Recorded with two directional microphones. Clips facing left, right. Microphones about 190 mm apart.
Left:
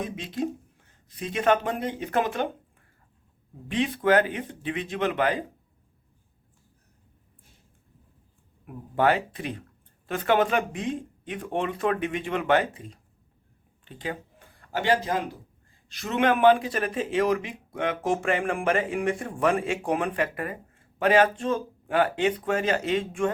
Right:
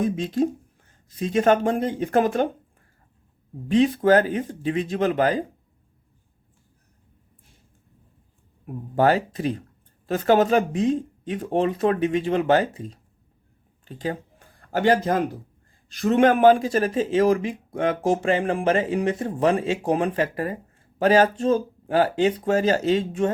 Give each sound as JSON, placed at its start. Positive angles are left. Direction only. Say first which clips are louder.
{"t": 0.0, "sound": "speech", "louder": "right 8 dB", "side_deg": -40}
{"t": 3.7, "sound": "speech", "louder": "right 6 dB", "side_deg": -40}
{"t": 8.6, "sound": "speech", "louder": "right 3 dB", "side_deg": -40}